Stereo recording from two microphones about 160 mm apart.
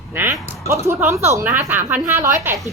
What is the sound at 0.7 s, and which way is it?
A woman's voice, 15° right (ahead or behind).